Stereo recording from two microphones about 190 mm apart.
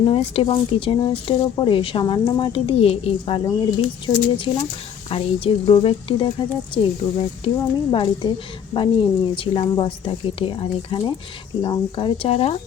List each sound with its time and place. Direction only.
0.0 s speech: 30° left (ahead or behind)